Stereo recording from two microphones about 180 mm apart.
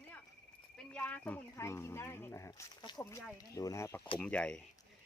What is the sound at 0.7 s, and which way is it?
Speech, 5° left (ahead or behind).